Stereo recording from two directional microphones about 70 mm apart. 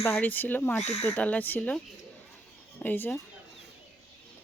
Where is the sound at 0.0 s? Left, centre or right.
Left.